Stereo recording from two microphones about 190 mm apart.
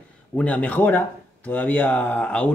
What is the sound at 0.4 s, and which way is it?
Speech, 5° left (ahead or behind).